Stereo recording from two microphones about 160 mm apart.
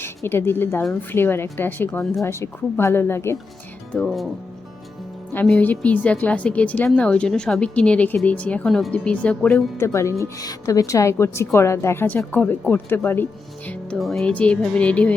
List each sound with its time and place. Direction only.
0.0 s a woman's voice: 15° left (ahead or behind)
3.9 s speech: centre (ahead or behind)
5.3 s a woman's voice: 10° left (ahead or behind)
9.7 s a woman's voice: 15° left (ahead or behind)